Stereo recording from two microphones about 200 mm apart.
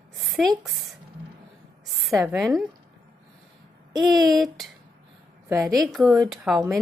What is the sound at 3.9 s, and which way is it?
Speech, centre (ahead or behind).